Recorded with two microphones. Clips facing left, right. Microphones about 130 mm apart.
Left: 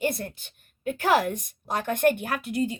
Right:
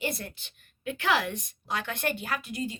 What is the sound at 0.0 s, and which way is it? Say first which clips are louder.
A woman's voice: left 5 dB; 50° left (ahead or behind).